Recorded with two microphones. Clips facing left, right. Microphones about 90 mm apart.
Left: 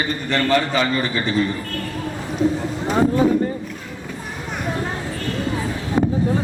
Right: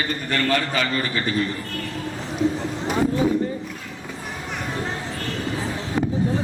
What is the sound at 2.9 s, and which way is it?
Speech, 35° left (ahead or behind).